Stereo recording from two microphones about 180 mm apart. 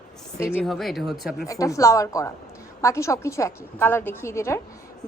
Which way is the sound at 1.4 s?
20° left (ahead or behind).